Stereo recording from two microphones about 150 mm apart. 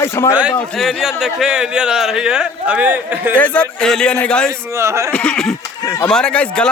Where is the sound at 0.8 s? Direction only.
Centre (ahead or behind).